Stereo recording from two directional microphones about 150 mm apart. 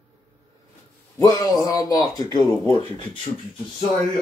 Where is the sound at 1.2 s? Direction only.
25° left (ahead or behind).